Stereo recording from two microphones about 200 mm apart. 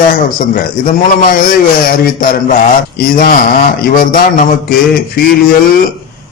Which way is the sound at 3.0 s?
45° left (ahead or behind).